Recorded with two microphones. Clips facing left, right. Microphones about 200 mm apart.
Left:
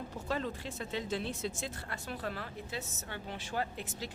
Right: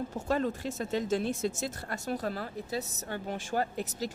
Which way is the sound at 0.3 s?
45° right (ahead or behind).